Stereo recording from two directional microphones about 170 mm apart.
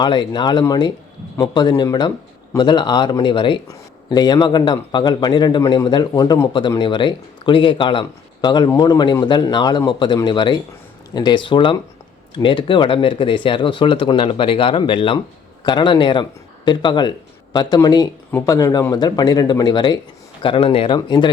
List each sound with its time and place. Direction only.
0.0 s speech: 25° left (ahead or behind)